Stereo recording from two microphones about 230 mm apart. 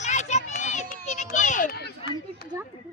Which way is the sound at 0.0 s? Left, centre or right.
Left.